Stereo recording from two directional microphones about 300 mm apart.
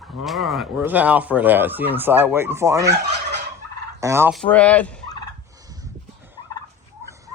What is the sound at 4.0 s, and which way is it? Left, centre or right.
Speech, centre.